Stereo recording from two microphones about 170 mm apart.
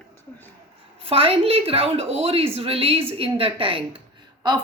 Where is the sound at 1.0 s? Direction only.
35° right (ahead or behind).